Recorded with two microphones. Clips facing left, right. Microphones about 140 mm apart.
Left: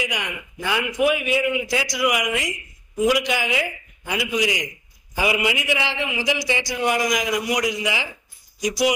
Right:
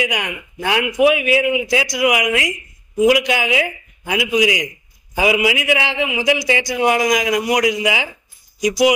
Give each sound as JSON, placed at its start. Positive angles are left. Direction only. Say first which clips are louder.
{"t": 0.2, "sound": "speech", "louder": "right 5 dB", "side_deg": -90}